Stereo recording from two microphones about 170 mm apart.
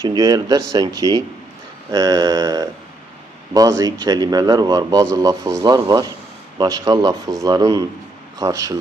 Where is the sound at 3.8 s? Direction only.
20° right (ahead or behind).